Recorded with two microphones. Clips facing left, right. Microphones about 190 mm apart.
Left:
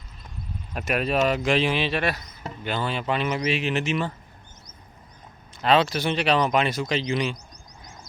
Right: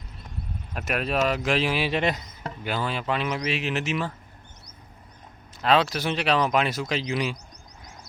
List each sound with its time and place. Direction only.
0.7 s speech: centre (ahead or behind)
1.9 s speech: 20° right (ahead or behind)
2.6 s speech: 5° right (ahead or behind)
5.6 s speech: centre (ahead or behind)